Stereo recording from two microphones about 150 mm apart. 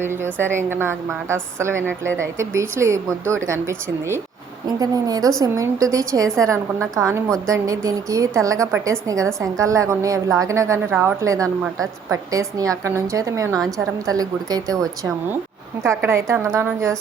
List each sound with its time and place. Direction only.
0.0 s a woman's voice: 15° right (ahead or behind)